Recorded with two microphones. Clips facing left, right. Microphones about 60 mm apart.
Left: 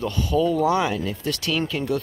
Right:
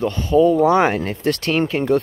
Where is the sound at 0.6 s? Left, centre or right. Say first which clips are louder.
Right 6 dB; right.